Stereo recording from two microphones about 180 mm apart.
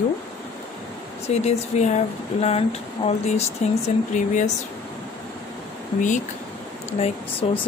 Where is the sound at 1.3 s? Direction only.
40° left (ahead or behind).